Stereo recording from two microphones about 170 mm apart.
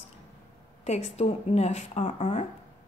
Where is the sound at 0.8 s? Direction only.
40° left (ahead or behind).